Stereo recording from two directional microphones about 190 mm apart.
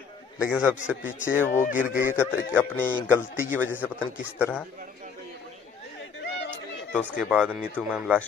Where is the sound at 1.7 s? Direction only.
10° right (ahead or behind).